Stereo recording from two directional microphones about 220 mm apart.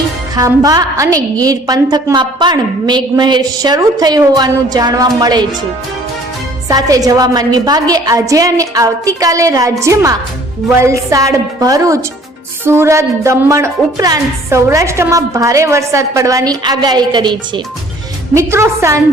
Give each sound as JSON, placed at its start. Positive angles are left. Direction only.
{"t": 0.3, "sound": "a woman's voice", "side_deg": -15}
{"t": 6.7, "sound": "a woman's voice", "side_deg": -15}